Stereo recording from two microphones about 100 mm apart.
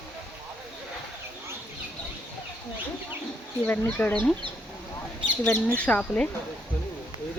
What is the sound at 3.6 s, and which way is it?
Speech, 20° left (ahead or behind).